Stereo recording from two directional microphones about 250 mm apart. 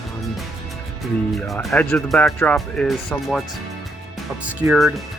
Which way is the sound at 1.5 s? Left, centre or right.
Centre.